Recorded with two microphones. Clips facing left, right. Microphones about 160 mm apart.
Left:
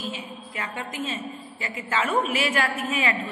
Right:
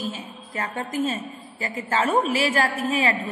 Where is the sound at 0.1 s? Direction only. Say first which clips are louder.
Right 1 dB; 40° right (ahead or behind).